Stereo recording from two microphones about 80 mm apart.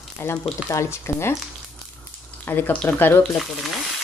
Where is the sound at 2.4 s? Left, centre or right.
Left.